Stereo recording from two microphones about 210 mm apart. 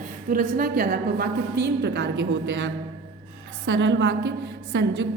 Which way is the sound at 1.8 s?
60° right (ahead or behind).